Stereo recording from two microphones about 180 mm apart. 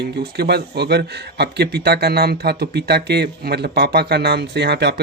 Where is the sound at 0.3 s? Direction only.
65° right (ahead or behind).